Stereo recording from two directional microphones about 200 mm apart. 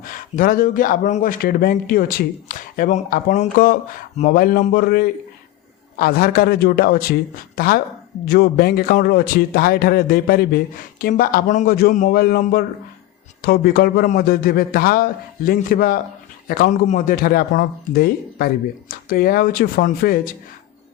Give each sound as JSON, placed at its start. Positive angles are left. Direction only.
{"t": 0.0, "sound": "speech", "side_deg": 45}